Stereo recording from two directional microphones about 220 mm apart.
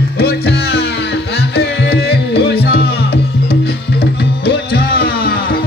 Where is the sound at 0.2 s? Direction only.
50° left (ahead or behind).